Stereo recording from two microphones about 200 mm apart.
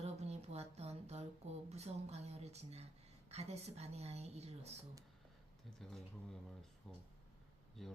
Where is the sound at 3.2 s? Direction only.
30° right (ahead or behind).